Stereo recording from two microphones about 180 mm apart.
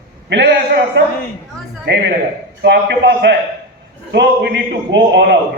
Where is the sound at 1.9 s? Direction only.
70° right (ahead or behind).